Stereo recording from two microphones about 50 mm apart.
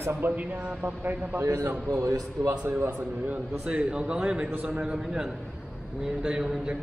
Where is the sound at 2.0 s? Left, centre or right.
Right.